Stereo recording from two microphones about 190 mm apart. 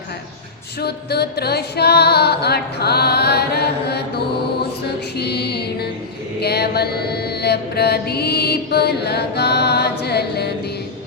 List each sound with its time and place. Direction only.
0.8 s mantra: 60° left (ahead or behind)
5.1 s music: 60° left (ahead or behind)
6.4 s mantra: 60° left (ahead or behind)